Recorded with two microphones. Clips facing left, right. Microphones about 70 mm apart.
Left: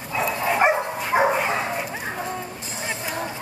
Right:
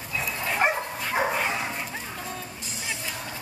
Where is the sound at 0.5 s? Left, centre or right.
Centre.